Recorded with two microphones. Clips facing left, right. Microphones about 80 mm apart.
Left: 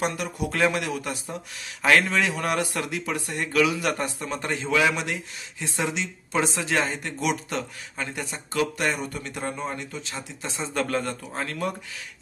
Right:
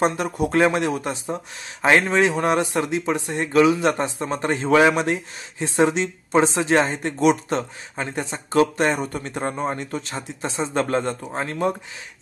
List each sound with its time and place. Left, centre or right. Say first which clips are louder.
0.0 s a man's voice: right 6 dB; right
10.1 s speech: right 6 dB; right